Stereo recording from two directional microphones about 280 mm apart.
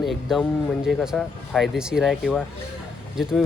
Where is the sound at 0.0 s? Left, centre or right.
Centre.